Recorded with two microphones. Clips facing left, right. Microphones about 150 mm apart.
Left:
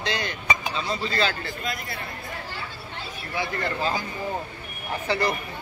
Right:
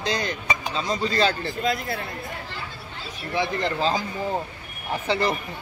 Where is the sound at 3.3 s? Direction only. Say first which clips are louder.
Right 4 dB; 25° right (ahead or behind).